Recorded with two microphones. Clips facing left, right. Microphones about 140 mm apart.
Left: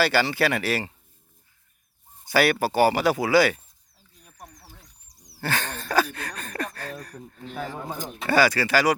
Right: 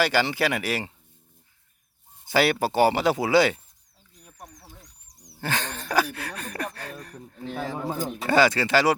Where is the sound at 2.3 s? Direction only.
20° right (ahead or behind).